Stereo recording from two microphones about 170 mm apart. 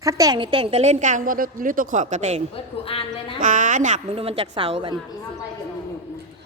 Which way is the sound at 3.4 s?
50° right (ahead or behind).